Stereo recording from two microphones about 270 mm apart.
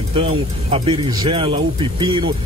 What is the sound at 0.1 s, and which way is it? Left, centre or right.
Speech, right.